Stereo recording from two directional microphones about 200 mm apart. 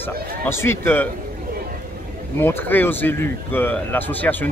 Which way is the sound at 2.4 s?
10° left (ahead or behind).